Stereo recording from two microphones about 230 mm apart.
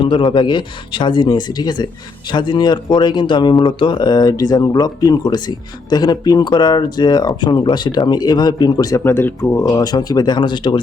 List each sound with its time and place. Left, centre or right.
0.0 s speech: left